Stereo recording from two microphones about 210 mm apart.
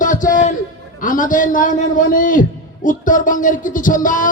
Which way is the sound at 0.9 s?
40° left (ahead or behind).